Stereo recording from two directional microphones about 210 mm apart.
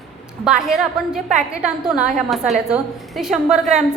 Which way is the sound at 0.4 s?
Centre (ahead or behind).